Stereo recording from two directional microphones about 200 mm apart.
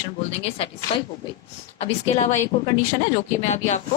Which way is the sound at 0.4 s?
30° left (ahead or behind).